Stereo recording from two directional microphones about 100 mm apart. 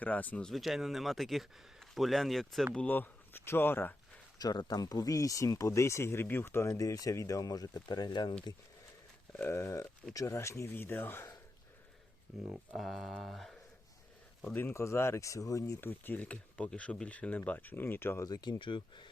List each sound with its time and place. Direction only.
0.0 s speech: 15° left (ahead or behind)
0.5 s speech: centre (ahead or behind)
2.7 s speech: 15° left (ahead or behind)
4.4 s speech: 40° left (ahead or behind)
9.3 s speech: 20° left (ahead or behind)
12.7 s speech: centre (ahead or behind)
14.5 s speech: 20° left (ahead or behind)
15.8 s speech: 20° left (ahead or behind)
18.3 s speech: 40° left (ahead or behind)
18.6 s speech: 55° left (ahead or behind)